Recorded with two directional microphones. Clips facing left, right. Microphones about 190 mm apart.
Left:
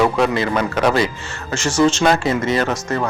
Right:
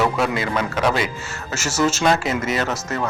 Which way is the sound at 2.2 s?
35° left (ahead or behind).